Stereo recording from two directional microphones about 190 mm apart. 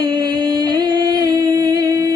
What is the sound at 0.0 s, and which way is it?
Music, 20° right (ahead or behind).